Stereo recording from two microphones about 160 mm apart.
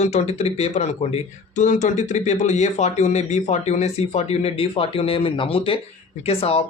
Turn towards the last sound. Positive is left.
turn(degrees=40)  # may be behind; listen again after turning